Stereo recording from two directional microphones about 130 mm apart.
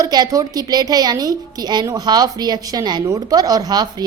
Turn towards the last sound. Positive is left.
turn(degrees=-30)  # may be behind; listen again after turning